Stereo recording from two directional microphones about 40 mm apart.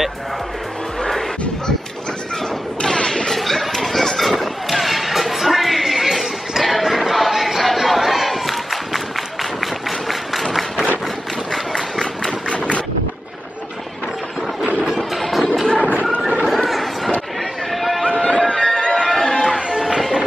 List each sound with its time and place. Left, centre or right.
2.8 s artillery fire: centre
3.3 s a sound: centre
6.6 s crowd: centre
11.5 s run: centre
12.4 s vehicle: left
15.0 s music: centre
16.4 s chatter: centre
17.7 s a sound: centre
18.1 s music: left
18.9 s music: centre
19.5 s music: centre